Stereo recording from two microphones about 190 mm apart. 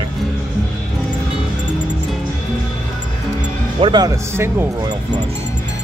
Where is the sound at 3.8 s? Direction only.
20° right (ahead or behind).